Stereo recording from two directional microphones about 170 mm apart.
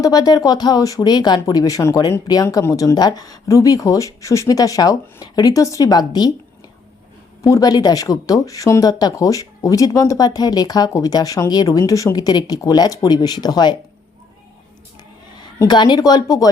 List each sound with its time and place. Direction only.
0.0 s speech: 20° left (ahead or behind)
7.4 s speech: 20° left (ahead or behind)
15.5 s speech: 25° left (ahead or behind)